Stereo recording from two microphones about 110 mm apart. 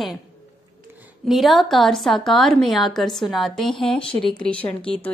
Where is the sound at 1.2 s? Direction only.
Centre (ahead or behind).